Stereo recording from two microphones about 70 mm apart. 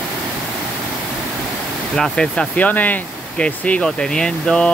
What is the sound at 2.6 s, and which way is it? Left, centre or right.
Speech, left.